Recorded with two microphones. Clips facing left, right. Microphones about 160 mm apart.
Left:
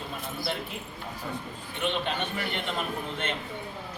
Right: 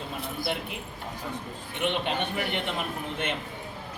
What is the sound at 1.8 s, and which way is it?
Speech, 15° right (ahead or behind).